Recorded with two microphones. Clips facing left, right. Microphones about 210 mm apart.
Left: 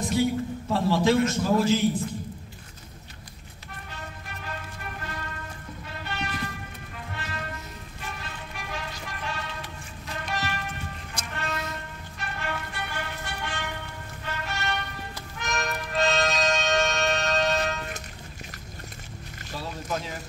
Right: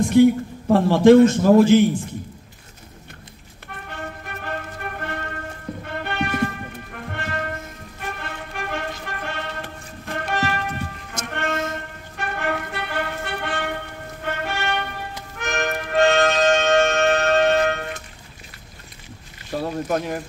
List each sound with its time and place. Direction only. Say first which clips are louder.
0.0 s a man's voice: right 10 dB; 55° right (ahead or behind)
3.6 s music: right 8 dB; 60° right (ahead or behind)
19.5 s boat: right 9 dB; 55° right (ahead or behind)